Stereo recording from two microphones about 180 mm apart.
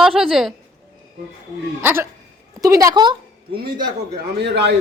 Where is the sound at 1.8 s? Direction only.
10° right (ahead or behind).